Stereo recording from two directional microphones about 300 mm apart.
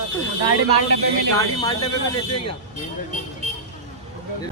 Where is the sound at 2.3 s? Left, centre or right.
Left.